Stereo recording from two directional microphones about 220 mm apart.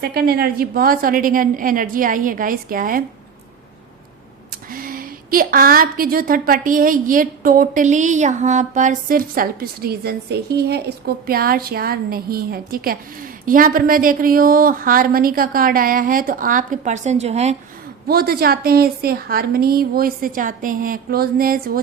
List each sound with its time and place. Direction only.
0.0 s a woman's voice: 45° right (ahead or behind)
4.7 s a woman's voice: 40° right (ahead or behind)
18.1 s a woman's voice: 45° right (ahead or behind)